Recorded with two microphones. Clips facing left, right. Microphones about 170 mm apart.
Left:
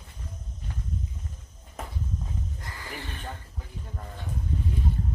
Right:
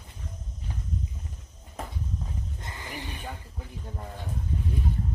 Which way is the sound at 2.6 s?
20° right (ahead or behind).